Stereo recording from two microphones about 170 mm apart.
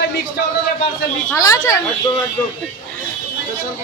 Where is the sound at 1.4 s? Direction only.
20° left (ahead or behind).